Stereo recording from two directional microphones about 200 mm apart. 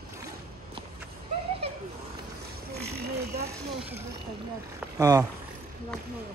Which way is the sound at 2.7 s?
55° right (ahead or behind).